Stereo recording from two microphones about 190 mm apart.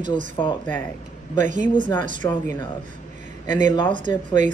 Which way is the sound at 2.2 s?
15° left (ahead or behind).